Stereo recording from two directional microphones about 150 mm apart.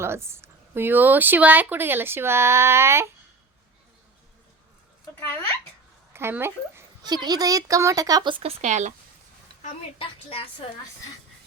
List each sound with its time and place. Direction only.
0.0 s speech: 15° right (ahead or behind)
6.1 s speech: 15° right (ahead or behind)
7.0 s speech: 30° right (ahead or behind); by 8.9 s 50° right (ahead or behind)
10.0 s a woman's voice: 40° left (ahead or behind)